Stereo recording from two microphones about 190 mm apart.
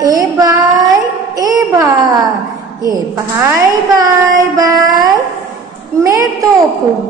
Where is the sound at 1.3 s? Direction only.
15° right (ahead or behind).